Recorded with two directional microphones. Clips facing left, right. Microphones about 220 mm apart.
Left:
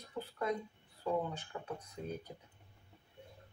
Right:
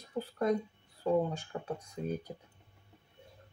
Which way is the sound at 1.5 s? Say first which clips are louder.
Right 5 dB; 45° right (ahead or behind).